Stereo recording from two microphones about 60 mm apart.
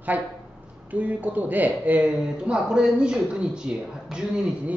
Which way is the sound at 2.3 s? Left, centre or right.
Centre.